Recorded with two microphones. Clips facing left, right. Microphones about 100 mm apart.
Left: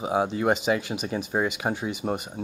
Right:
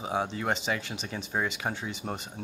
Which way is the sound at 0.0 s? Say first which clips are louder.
Left 6 dB; 15° left (ahead or behind).